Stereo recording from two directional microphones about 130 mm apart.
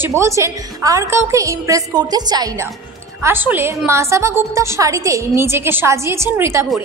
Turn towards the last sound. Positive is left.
turn(degrees=-20)  # may be behind; listen again after turning